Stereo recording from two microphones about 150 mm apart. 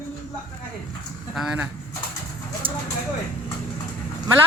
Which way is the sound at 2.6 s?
35° right (ahead or behind).